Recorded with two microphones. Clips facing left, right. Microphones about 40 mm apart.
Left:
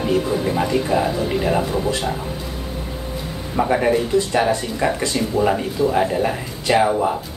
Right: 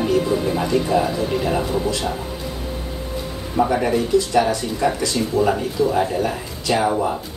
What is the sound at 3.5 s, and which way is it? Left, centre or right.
Speech, centre.